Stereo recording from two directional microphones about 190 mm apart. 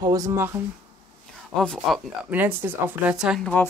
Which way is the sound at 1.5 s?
5° left (ahead or behind).